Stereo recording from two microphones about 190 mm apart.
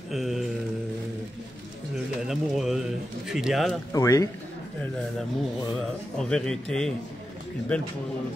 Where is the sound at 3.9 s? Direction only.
15° left (ahead or behind).